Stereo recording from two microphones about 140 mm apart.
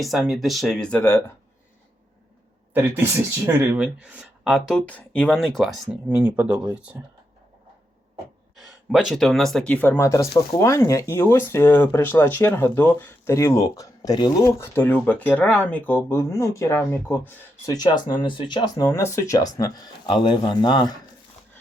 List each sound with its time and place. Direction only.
0.0 s speech: centre (ahead or behind)
2.7 s speech: 15° right (ahead or behind)
4.9 s speech: 10° left (ahead or behind)
6.1 s speech: 10° right (ahead or behind)
8.6 s speech: centre (ahead or behind); by 14.7 s 25° left (ahead or behind)
14.8 s speech: 15° left (ahead or behind)
17.7 s speech: 30° left (ahead or behind)